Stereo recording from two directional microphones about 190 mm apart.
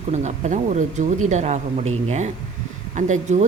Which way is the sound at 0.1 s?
40° right (ahead or behind).